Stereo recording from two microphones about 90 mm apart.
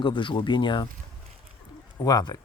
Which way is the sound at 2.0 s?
45° left (ahead or behind).